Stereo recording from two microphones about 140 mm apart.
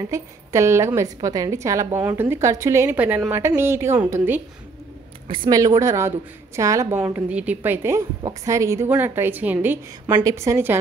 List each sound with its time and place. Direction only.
0.1 s a woman's voice: 20° right (ahead or behind)
5.3 s a woman's voice: 30° right (ahead or behind)
7.1 s a woman's voice: 10° right (ahead or behind)